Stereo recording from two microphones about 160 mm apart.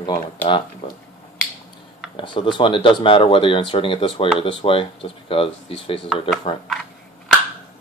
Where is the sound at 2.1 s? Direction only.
30° left (ahead or behind).